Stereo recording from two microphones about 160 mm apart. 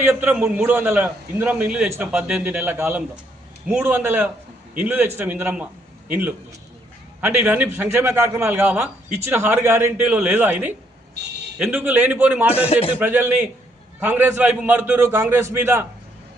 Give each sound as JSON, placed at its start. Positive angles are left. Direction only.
{"t": 0.0, "sound": "a man's voice", "side_deg": -15}
{"t": 12.5, "sound": "speech", "side_deg": 40}
{"t": 13.0, "sound": "a man's voice", "side_deg": -15}